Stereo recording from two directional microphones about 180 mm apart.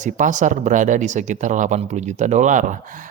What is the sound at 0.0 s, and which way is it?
Speech, 45° right (ahead or behind).